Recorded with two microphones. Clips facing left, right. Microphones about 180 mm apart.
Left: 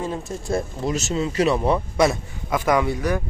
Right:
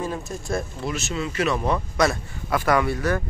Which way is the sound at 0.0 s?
25° left (ahead or behind).